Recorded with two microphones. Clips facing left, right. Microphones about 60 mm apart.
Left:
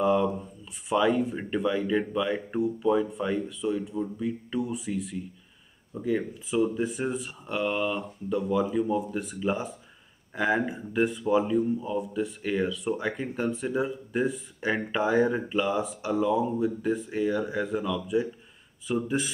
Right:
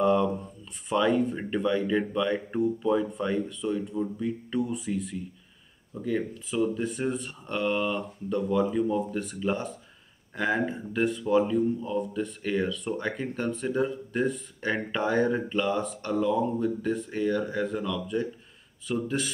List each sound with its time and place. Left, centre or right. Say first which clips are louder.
0.0 s speech: even; centre